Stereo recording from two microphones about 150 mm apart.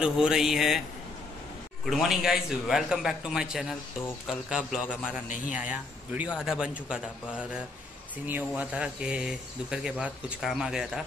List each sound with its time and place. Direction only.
0.0 s speech: 5° right (ahead or behind)
1.9 s speech: centre (ahead or behind)
8.3 s speech: 10° right (ahead or behind)